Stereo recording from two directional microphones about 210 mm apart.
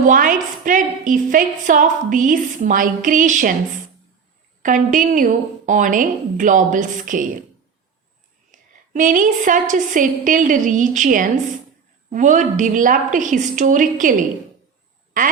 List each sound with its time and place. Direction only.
0.0 s a woman's voice: 40° right (ahead or behind)
4.6 s a woman's voice: 40° right (ahead or behind)
8.5 s a woman's voice: 40° right (ahead or behind)